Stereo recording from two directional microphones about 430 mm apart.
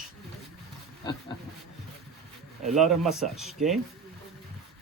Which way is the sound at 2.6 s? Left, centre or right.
Centre.